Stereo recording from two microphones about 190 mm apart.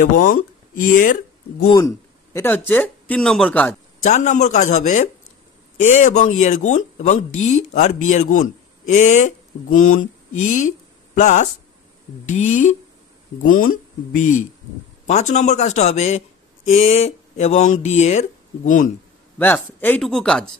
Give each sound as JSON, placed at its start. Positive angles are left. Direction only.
{"t": 0.0, "sound": "speech", "side_deg": 45}
{"t": 1.7, "sound": "speech", "side_deg": 15}
{"t": 4.0, "sound": "a man's voice", "side_deg": 40}
{"t": 11.1, "sound": "a man's voice", "side_deg": 40}
{"t": 19.3, "sound": "speech", "side_deg": 10}